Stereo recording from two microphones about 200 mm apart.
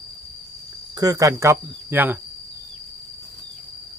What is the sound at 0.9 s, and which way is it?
Speech, 20° right (ahead or behind).